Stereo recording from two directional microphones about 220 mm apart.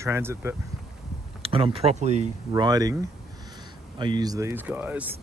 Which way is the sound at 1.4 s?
25° right (ahead or behind).